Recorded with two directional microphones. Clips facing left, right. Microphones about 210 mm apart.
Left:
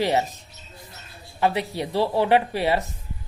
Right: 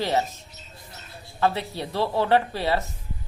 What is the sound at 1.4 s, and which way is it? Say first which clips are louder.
A woman's voice: left 2 dB; 15° left (ahead or behind).